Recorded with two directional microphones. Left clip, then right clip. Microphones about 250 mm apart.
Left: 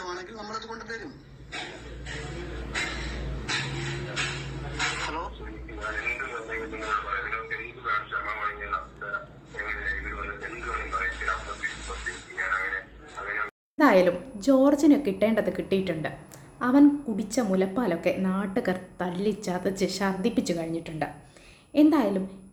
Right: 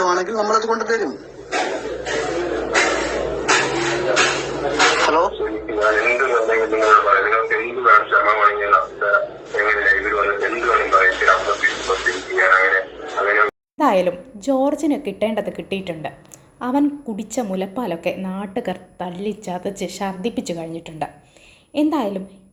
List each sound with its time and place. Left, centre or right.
0.0 s a sound: right
13.7 s a woman's voice: centre
20.2 s a woman's voice: centre
20.5 s a woman's voice: centre